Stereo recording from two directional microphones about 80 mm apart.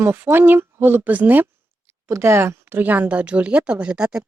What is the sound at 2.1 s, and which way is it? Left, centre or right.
Speech, right.